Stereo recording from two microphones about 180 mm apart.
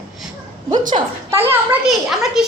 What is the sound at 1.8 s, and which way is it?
Speech, centre (ahead or behind).